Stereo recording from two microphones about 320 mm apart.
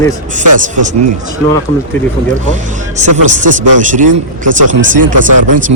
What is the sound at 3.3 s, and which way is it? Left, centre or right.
Speech, right.